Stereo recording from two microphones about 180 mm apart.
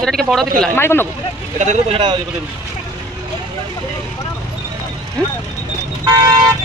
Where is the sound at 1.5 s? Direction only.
40° right (ahead or behind).